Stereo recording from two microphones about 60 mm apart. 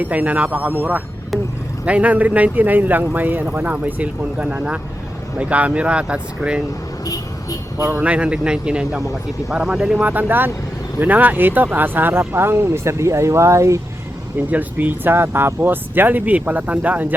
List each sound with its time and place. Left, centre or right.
0.0 s speech: right
7.0 s vehicle: left
7.8 s speech: right
8.0 s speech: right
10.0 s speech: right
14.3 s speech: right